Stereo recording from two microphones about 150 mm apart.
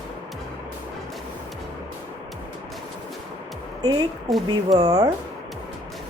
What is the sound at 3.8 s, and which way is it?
Speech, 25° right (ahead or behind).